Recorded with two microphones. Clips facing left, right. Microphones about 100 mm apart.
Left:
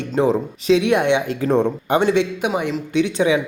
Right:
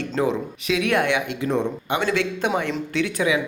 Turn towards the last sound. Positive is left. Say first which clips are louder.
# left 5 dB
turn(degrees=25)  # may be behind; listen again after turning